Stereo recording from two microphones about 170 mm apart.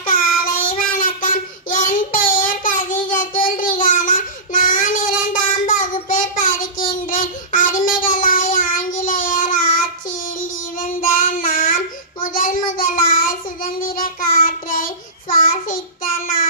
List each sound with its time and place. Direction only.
0.0 s child singing: 55° left (ahead or behind)